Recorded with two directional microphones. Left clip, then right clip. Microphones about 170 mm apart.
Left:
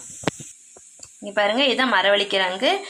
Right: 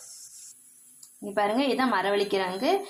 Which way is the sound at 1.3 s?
Centre (ahead or behind).